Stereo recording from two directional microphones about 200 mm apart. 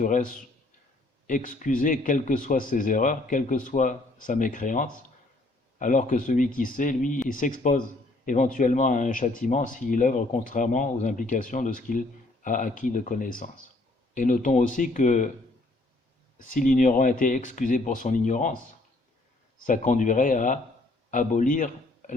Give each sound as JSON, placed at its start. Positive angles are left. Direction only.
{"t": 0.0, "sound": "a man's voice", "side_deg": 40}
{"t": 16.5, "sound": "speech", "side_deg": 40}
{"t": 19.6, "sound": "a man's voice", "side_deg": 40}